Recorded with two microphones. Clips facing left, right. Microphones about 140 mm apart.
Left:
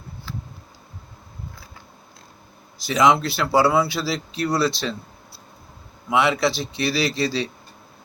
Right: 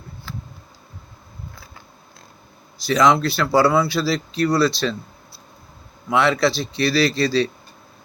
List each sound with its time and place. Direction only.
2.8 s speech: 15° left (ahead or behind)
6.1 s speech: 15° left (ahead or behind)